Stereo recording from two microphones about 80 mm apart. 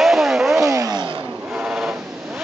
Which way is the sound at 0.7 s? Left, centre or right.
Right.